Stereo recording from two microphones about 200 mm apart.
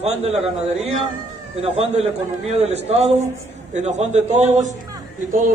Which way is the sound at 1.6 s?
30° right (ahead or behind).